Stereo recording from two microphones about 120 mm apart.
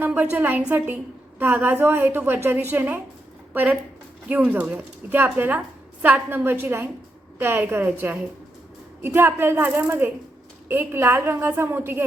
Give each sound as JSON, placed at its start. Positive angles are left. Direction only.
{"t": 0.0, "sound": "a woman's voice", "side_deg": -15}